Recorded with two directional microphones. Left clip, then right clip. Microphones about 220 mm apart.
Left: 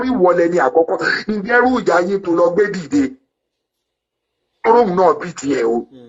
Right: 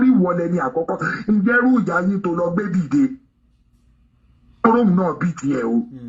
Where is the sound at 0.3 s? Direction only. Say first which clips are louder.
Left 8 dB; 20° left (ahead or behind).